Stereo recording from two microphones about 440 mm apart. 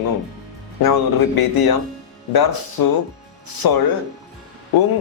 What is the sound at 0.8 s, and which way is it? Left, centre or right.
Speech, left.